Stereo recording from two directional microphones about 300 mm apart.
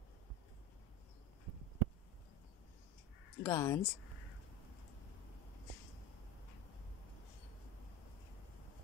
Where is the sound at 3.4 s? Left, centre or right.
Centre.